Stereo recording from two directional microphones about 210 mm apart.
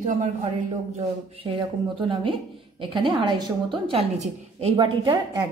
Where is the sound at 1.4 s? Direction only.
25° right (ahead or behind).